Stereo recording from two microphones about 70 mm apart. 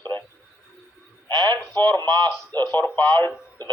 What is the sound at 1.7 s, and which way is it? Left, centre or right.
Speech, left.